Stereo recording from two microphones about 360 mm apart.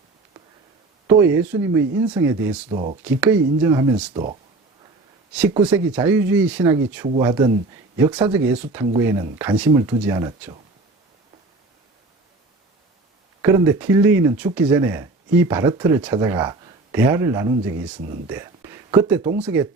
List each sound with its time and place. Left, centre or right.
1.0 s speech: centre
2.6 s speech: centre
3.0 s speech: centre
5.5 s speech: centre
13.4 s speech: centre
18.3 s a sound: centre
19.4 s speech: centre